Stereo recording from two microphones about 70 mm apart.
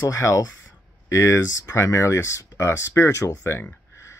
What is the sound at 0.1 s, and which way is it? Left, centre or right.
Speech, left.